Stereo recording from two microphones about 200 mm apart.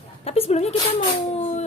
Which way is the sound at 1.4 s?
30° left (ahead or behind).